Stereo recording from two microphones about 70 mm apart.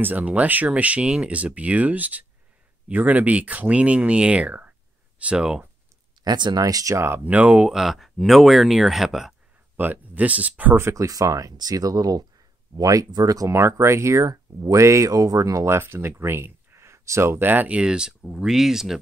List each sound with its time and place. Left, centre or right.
0.0 s speech: right
6.2 s speech: right
7.2 s speech: centre
9.8 s speech: right
10.8 s speech: right
11.1 s speech: right
11.5 s speech: right
13.6 s speech: right; by 18.9 s centre